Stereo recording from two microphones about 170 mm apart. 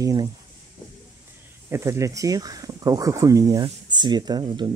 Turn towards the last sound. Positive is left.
turn(degrees=-25)  # may be behind; listen again after turning